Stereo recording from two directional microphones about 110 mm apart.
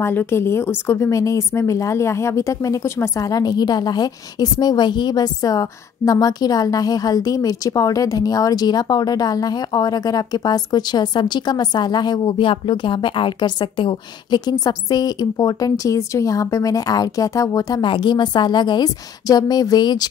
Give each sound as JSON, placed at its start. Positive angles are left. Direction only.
{"t": 0.0, "sound": "a woman's voice", "side_deg": 20}
{"t": 17.8, "sound": "a woman's voice", "side_deg": 45}